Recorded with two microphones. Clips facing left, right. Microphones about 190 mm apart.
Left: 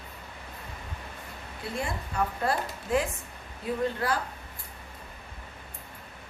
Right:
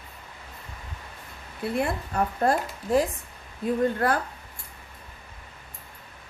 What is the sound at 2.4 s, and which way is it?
Speech, 40° right (ahead or behind).